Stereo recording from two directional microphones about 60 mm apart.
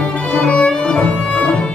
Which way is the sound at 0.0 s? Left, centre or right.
Left.